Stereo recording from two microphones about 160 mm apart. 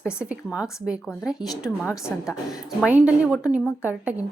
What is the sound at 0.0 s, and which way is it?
A woman's voice, 5° right (ahead or behind).